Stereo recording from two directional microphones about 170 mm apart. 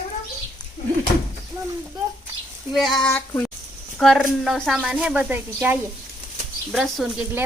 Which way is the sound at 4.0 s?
Centre (ahead or behind).